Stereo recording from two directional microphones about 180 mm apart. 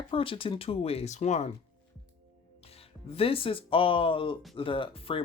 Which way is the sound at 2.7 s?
35° left (ahead or behind).